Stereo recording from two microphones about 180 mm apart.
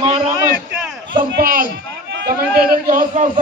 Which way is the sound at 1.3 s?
55° right (ahead or behind).